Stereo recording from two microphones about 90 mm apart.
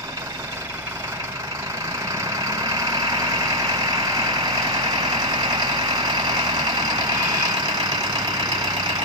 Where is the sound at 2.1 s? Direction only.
35° right (ahead or behind).